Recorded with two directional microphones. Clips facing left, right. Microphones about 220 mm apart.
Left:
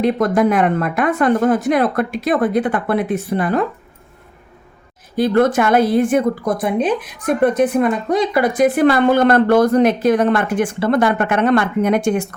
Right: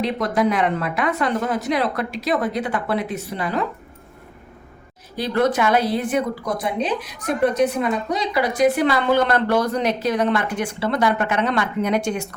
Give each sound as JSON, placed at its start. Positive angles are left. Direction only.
{"t": 0.0, "sound": "a woman's voice", "side_deg": 50}
{"t": 5.1, "sound": "a woman's voice", "side_deg": 50}